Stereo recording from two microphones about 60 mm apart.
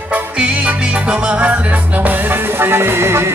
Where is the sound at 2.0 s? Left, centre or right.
Right.